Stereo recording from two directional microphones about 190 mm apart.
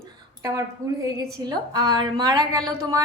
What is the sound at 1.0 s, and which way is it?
A woman's voice, 20° right (ahead or behind).